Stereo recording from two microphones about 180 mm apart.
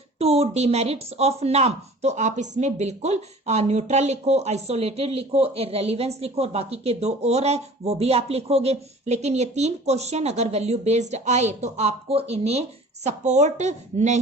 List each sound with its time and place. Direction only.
0.2 s speech: 35° right (ahead or behind)